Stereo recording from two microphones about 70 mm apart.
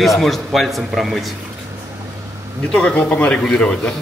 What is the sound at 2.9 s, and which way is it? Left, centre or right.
A man's voice, left.